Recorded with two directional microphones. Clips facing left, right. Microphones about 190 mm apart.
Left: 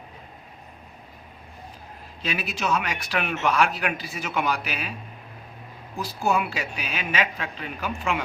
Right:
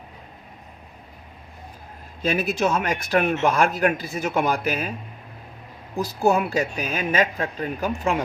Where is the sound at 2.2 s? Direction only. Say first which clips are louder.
Right 6 dB; 50° right (ahead or behind).